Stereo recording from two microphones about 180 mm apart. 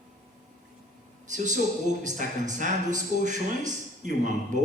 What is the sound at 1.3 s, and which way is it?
Speech, 45° right (ahead or behind).